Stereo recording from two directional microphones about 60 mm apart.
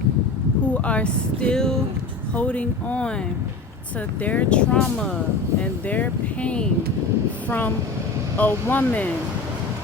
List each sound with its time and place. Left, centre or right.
0.7 s speech: left
2.3 s speech: left
4.2 s speech: left
5.5 s speech: left
8.4 s speech: left